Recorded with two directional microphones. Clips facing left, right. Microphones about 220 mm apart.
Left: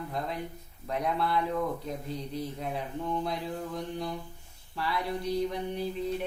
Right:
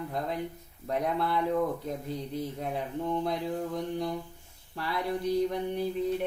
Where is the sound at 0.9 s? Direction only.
50° right (ahead or behind).